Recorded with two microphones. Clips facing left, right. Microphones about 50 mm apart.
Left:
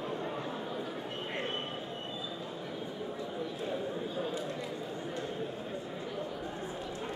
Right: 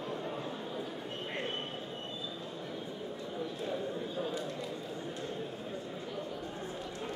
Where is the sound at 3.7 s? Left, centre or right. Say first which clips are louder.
Left 1 dB; centre.